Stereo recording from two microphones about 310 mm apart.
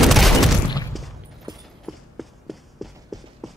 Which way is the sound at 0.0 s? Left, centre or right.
Centre.